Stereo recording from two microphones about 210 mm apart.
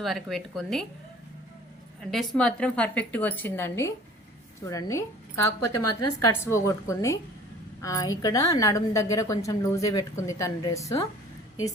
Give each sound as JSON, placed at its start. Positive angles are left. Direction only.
{"t": 0.0, "sound": "a woman's voice", "side_deg": 0}
{"t": 2.0, "sound": "a woman's voice", "side_deg": 0}
{"t": 5.8, "sound": "a woman's voice", "side_deg": 90}
{"t": 6.4, "sound": "a woman's voice", "side_deg": 15}